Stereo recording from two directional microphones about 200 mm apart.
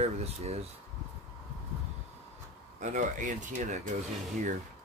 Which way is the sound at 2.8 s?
40° right (ahead or behind).